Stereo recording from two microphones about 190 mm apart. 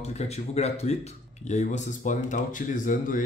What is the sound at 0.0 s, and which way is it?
Speech, 35° left (ahead or behind).